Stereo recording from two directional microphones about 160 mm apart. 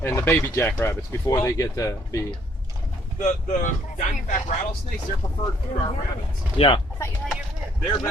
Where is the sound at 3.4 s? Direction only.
50° left (ahead or behind).